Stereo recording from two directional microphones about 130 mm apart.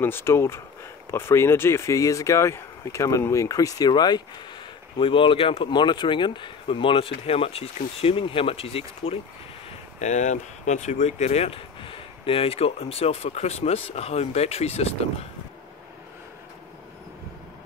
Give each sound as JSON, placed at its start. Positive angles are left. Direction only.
{"t": 0.0, "sound": "speech", "side_deg": 20}
{"t": 4.9, "sound": "speech", "side_deg": 45}
{"t": 9.7, "sound": "speech", "side_deg": 65}